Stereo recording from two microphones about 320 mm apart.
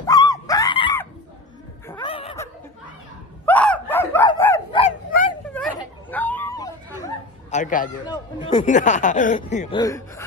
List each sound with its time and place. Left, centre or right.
0.0 s dog: centre
1.9 s snicker: centre
3.4 s dog: centre
5.5 s a sound: centre
7.5 s a sound: left
8.1 s speech: centre